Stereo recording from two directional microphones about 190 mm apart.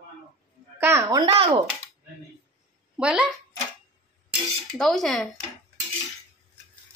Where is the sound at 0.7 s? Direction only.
15° right (ahead or behind).